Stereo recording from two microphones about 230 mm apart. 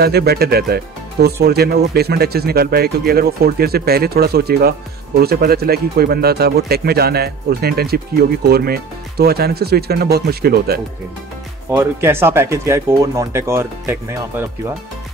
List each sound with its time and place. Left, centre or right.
0.0 s speech: right
11.7 s speech: centre